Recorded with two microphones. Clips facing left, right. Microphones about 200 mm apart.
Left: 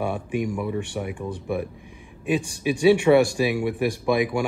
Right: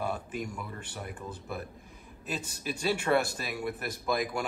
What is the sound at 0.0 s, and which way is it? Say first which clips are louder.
Speech: left 9 dB; 65° left (ahead or behind).